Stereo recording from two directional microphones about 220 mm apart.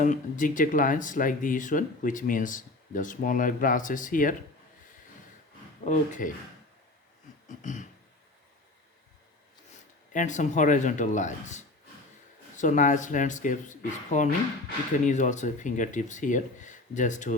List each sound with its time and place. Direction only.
0.0 s speech: 35° left (ahead or behind)
5.8 s speech: 35° left (ahead or behind)
7.4 s a sound: 35° left (ahead or behind)
10.1 s speech: 35° left (ahead or behind)